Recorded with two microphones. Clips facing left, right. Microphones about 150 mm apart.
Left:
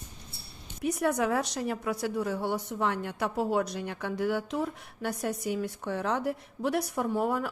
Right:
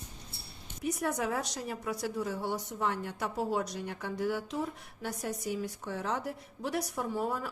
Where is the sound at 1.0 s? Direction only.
65° left (ahead or behind).